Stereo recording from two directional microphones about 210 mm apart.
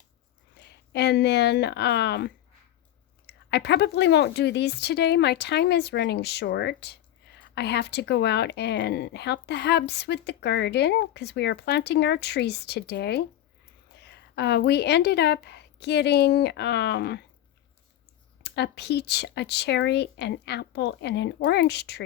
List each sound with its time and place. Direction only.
0.5 s a woman's voice: 50° left (ahead or behind)
18.4 s speech: 55° left (ahead or behind)